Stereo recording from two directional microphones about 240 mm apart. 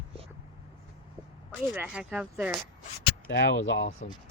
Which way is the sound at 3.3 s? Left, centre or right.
Left.